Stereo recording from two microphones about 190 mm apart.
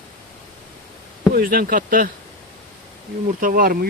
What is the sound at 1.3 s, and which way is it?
Speech, 50° right (ahead or behind).